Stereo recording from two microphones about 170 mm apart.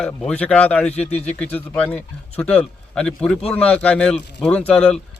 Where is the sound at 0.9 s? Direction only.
40° left (ahead or behind).